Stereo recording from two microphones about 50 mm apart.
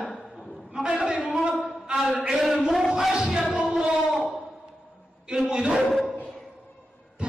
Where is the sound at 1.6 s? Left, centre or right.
Centre.